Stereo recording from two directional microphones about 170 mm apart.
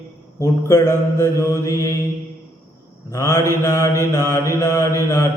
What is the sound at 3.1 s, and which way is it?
Mantra, 20° left (ahead or behind).